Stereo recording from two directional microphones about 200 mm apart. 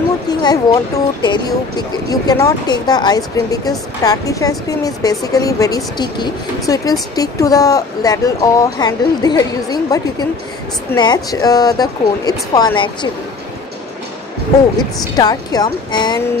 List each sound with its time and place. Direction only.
0.3 s speech: 20° left (ahead or behind)
14.8 s speech: 20° left (ahead or behind)